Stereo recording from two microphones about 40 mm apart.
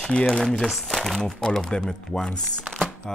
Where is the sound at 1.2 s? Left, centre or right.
Centre.